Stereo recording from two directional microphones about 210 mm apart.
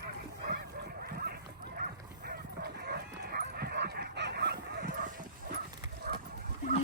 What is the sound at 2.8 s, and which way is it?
Dog, 50° right (ahead or behind).